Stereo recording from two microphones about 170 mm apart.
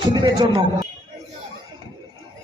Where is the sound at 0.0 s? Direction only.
25° right (ahead or behind).